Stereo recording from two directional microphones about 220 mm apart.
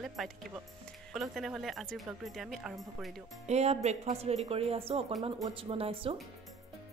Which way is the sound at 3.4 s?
30° right (ahead or behind).